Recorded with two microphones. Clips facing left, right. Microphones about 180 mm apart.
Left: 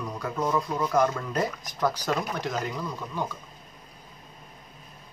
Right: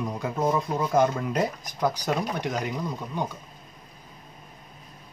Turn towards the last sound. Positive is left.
turn(degrees=-15)  # may be behind; listen again after turning